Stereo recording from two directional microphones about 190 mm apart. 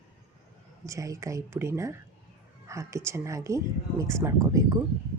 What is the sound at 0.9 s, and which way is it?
Speech, 15° right (ahead or behind).